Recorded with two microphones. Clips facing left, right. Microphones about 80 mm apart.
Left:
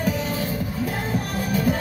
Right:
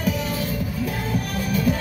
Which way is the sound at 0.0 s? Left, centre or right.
Left.